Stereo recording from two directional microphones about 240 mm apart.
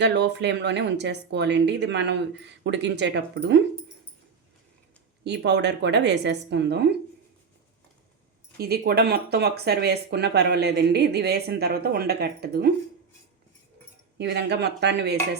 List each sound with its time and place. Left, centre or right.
0.0 s speech: right
5.2 s speech: right
8.5 s speech: right
14.2 s speech: right